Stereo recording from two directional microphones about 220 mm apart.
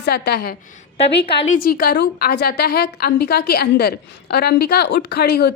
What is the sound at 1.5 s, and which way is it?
A woman's voice, 40° left (ahead or behind).